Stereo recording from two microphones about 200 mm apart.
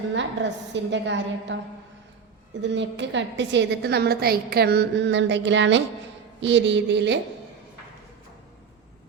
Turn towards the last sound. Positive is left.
turn(degrees=-60)  # may be behind; listen again after turning